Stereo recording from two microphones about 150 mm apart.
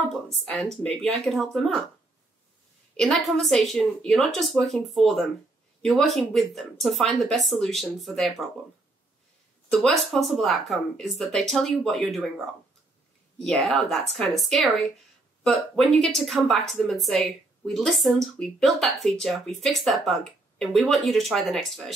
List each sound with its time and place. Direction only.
0.1 s speech: centre (ahead or behind)
3.0 s speech: centre (ahead or behind)
9.7 s speech: centre (ahead or behind)
13.4 s speech: centre (ahead or behind)